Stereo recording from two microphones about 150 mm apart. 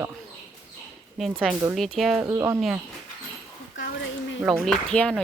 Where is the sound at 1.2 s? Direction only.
Centre (ahead or behind).